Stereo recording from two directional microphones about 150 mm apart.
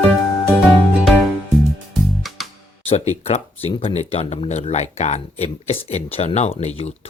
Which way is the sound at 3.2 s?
45° left (ahead or behind).